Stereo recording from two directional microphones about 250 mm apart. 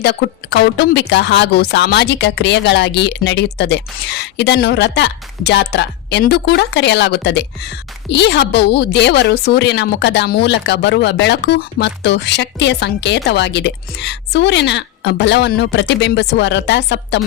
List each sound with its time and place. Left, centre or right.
0.0 s a woman's voice: left